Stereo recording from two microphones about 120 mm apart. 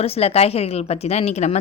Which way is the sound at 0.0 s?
55° left (ahead or behind).